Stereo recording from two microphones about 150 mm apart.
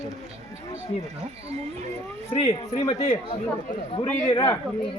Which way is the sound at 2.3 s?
40° left (ahead or behind).